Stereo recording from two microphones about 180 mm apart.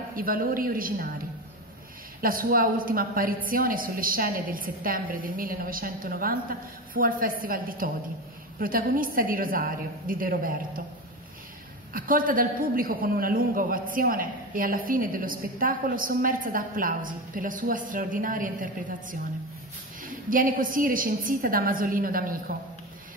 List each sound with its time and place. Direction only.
0.1 s a man's voice: 50° right (ahead or behind)
2.2 s a man's voice: 50° right (ahead or behind)
11.9 s a man's voice: 50° right (ahead or behind)